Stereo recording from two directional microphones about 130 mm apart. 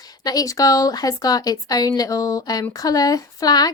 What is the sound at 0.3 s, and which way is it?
A woman's voice, 30° left (ahead or behind).